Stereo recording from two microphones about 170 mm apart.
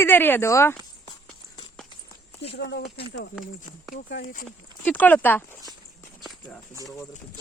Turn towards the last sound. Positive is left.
turn(degrees=10)  # may be behind; listen again after turning